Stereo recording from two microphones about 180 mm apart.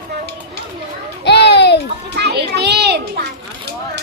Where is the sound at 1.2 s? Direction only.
70° left (ahead or behind).